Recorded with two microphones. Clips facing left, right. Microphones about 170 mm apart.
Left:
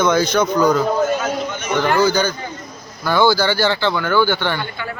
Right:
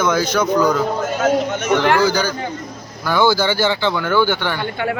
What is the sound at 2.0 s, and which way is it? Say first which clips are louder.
Speech: even; 10° right (ahead or behind).